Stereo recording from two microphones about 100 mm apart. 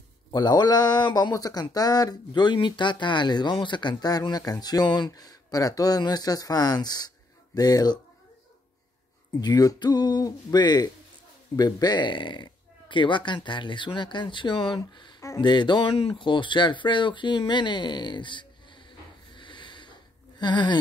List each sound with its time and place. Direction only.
0.3 s speech: 45° left (ahead or behind)
9.4 s speech: 40° left (ahead or behind); by 14.8 s 60° left (ahead or behind)
15.1 s a sound: 35° left (ahead or behind)
15.4 s speech: 50° left (ahead or behind)
15.9 s speech: 75° left (ahead or behind); by 18.9 s 55° left (ahead or behind)
19.3 s a sound: 55° left (ahead or behind)